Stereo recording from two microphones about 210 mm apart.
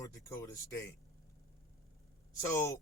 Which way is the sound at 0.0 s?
15° left (ahead or behind).